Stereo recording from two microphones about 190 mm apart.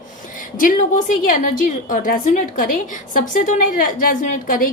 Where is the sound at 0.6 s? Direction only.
45° left (ahead or behind).